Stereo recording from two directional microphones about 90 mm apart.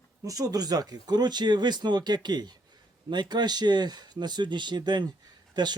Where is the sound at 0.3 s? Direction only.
40° right (ahead or behind).